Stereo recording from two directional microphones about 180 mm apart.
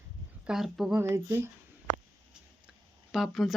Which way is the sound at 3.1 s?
Centre (ahead or behind).